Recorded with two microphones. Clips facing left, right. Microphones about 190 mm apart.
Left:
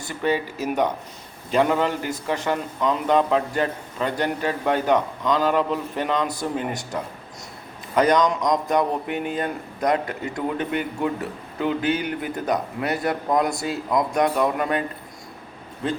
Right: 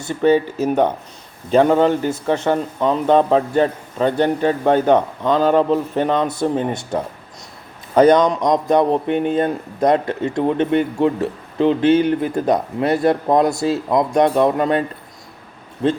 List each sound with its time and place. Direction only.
0.7 s a man's voice: 30° right (ahead or behind)